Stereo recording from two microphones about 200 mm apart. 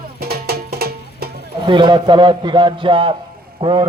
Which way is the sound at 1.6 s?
25° right (ahead or behind).